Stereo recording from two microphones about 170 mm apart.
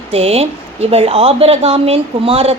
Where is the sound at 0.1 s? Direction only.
35° right (ahead or behind).